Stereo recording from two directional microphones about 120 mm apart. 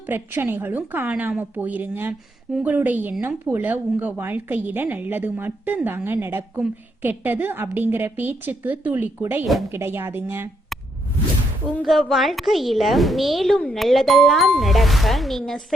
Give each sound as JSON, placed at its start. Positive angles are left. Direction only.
{"t": 0.1, "sound": "speech", "side_deg": -15}
{"t": 11.8, "sound": "speech", "side_deg": 0}